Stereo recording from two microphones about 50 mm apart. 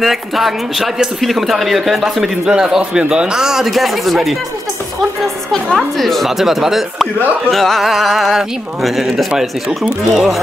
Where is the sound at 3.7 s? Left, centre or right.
Centre.